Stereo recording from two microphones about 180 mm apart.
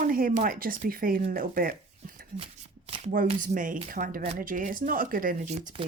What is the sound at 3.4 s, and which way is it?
Speech, 45° right (ahead or behind).